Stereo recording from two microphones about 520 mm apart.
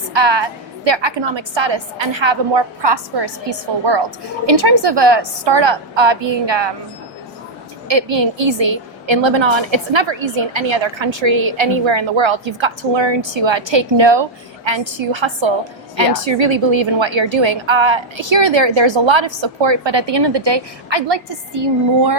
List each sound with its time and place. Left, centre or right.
0.1 s a woman's voice: right
7.9 s a woman's voice: right